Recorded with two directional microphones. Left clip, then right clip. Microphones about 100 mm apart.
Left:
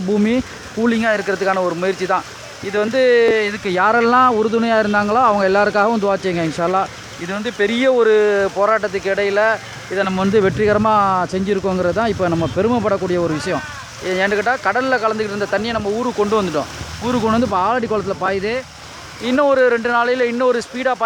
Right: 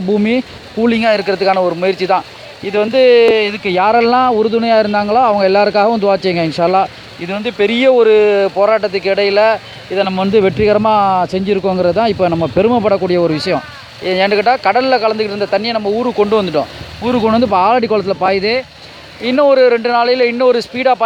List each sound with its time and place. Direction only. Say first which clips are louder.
0.1 s speech: right 4 dB; 25° right (ahead or behind)